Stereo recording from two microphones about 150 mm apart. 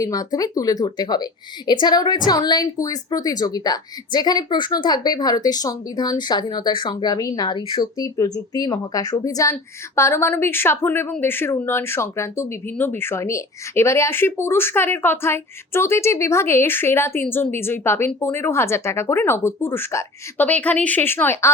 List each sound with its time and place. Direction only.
0.0 s a woman's voice: 25° left (ahead or behind)